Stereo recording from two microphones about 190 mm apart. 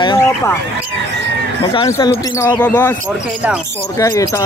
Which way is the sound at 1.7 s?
20° left (ahead or behind).